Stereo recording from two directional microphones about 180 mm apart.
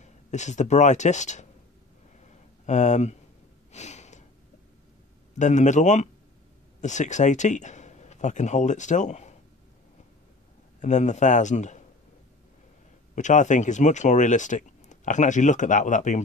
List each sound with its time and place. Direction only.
0.0 s speech: 40° left (ahead or behind)
2.6 s a man's voice: 40° left (ahead or behind)
3.7 s a sound: 40° left (ahead or behind)
5.4 s a man's voice: 40° left (ahead or behind)
10.8 s a man's voice: 40° left (ahead or behind)
13.1 s speech: 45° left (ahead or behind)